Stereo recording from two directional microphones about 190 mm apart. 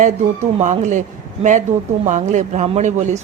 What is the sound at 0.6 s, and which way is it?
Speech, 40° right (ahead or behind).